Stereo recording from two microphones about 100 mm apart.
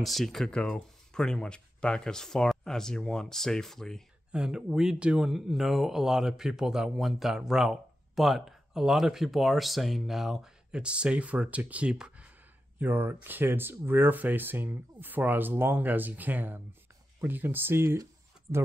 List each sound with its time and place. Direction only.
0.0 s speech: centre (ahead or behind)
4.3 s speech: 5° right (ahead or behind); by 18.6 s 30° right (ahead or behind)